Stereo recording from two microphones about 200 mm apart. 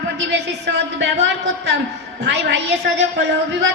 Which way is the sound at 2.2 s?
60° right (ahead or behind).